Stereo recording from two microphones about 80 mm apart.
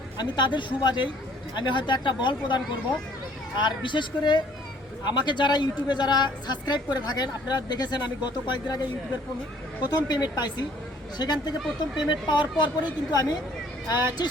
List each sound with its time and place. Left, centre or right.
0.2 s speech: left
3.6 s speech: left
9.8 s speech: left
13.1 s speech: left